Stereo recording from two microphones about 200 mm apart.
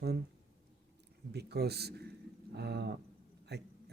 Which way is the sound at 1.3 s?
55° right (ahead or behind).